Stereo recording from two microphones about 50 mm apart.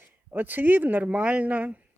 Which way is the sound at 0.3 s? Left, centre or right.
Right.